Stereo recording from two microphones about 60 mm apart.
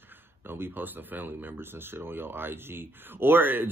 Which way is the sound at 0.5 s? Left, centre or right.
Right.